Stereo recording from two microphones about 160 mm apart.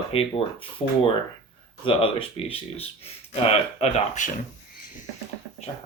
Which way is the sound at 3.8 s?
45° left (ahead or behind).